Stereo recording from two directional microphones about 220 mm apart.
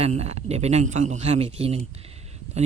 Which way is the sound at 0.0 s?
30° right (ahead or behind).